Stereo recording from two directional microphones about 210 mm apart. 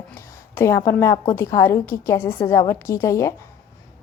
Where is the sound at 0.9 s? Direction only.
15° left (ahead or behind).